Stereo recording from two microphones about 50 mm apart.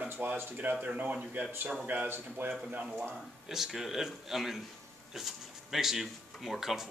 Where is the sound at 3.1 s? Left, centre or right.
Centre.